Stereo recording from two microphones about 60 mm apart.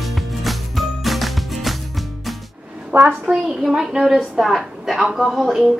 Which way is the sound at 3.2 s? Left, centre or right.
Centre.